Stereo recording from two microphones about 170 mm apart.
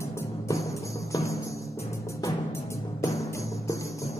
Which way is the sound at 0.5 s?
20° left (ahead or behind).